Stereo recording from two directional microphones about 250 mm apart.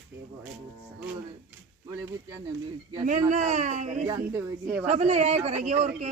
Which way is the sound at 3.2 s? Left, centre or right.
Right.